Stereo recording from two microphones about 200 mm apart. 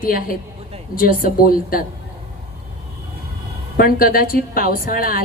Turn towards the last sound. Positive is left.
turn(degrees=45)  # may be behind; listen again after turning